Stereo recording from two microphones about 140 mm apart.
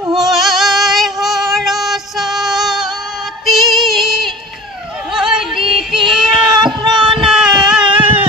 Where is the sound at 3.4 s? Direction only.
Centre (ahead or behind).